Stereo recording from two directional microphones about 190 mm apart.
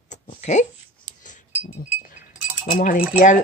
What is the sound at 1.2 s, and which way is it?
Wind chime, 40° left (ahead or behind).